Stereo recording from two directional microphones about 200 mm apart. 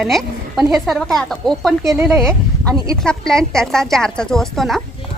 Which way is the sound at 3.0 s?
5° left (ahead or behind).